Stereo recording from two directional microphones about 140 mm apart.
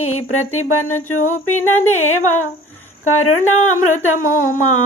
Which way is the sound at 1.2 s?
60° left (ahead or behind).